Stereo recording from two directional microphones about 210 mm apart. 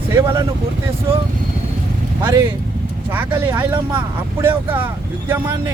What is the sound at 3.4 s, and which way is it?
Speech, 10° right (ahead or behind).